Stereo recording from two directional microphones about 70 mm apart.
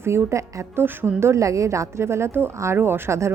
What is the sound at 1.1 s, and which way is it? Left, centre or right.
A woman's voice, right.